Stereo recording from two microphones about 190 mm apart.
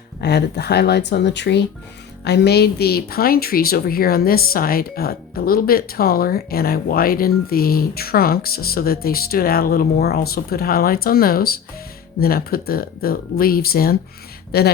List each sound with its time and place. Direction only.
0.2 s a woman's voice: 60° left (ahead or behind)